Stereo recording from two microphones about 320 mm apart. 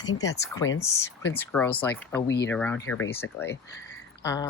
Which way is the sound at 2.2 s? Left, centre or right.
Left.